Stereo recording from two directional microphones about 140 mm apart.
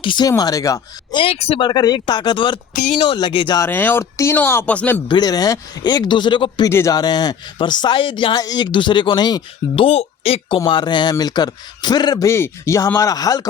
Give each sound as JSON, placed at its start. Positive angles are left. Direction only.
{"t": 0.0, "sound": "speech", "side_deg": 35}
{"t": 1.2, "sound": "speech", "side_deg": 45}
{"t": 1.6, "sound": "speech", "side_deg": 30}
{"t": 3.6, "sound": "speech", "side_deg": 15}
{"t": 5.0, "sound": "speech", "side_deg": 30}
{"t": 6.7, "sound": "speech", "side_deg": 20}
{"t": 9.8, "sound": "speech", "side_deg": 45}